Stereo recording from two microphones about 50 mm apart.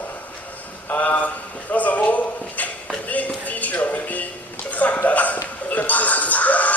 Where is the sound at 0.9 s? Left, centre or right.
Left.